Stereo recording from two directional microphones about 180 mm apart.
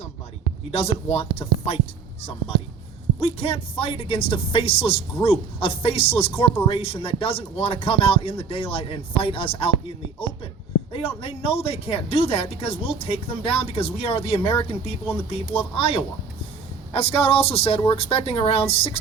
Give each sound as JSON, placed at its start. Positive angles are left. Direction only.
{"t": 0.7, "sound": "speech", "side_deg": 35}
{"t": 3.2, "sound": "speech", "side_deg": 35}
{"t": 11.2, "sound": "speech", "side_deg": 35}